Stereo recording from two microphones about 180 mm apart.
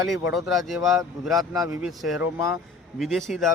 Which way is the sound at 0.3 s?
Centre (ahead or behind).